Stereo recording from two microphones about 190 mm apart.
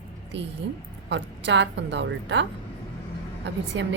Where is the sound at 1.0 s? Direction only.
70° right (ahead or behind).